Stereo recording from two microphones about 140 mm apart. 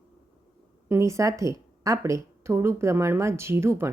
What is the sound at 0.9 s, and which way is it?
Speech, 20° right (ahead or behind).